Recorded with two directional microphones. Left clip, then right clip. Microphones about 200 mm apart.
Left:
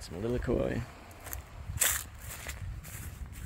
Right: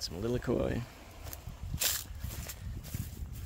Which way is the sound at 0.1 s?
10° right (ahead or behind).